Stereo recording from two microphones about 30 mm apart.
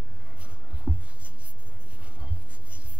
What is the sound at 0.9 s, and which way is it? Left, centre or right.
Writing, right.